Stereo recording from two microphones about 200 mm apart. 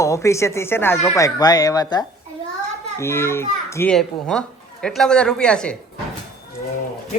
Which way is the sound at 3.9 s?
5° left (ahead or behind).